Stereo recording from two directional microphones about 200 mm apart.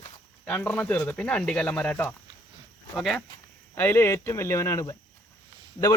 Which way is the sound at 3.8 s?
10° left (ahead or behind).